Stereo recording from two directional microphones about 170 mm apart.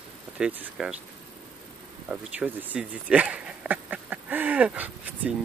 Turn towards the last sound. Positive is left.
turn(degrees=-10)  # may be behind; listen again after turning